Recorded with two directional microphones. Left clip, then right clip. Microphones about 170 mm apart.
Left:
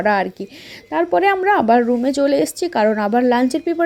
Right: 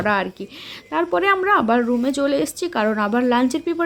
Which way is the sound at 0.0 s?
20° left (ahead or behind).